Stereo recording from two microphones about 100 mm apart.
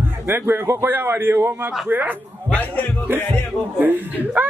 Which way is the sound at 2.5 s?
15° left (ahead or behind).